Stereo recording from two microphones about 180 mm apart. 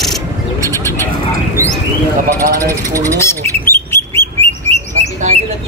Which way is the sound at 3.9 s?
15° left (ahead or behind).